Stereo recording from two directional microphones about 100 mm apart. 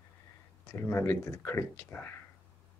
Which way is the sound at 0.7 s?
25° left (ahead or behind).